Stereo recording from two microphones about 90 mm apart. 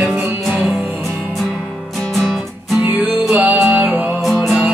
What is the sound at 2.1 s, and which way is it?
Music, 5° right (ahead or behind).